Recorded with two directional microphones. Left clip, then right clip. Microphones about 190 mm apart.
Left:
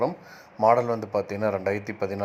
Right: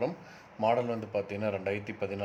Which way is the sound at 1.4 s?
20° left (ahead or behind).